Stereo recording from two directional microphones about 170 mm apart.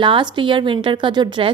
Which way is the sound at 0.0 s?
30° right (ahead or behind).